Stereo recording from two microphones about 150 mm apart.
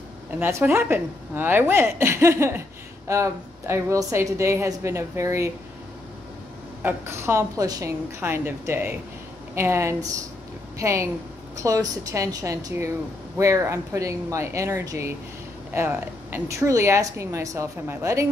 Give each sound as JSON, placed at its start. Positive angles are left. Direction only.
{"t": 0.4, "sound": "speech", "side_deg": -15}
{"t": 6.8, "sound": "speech", "side_deg": -15}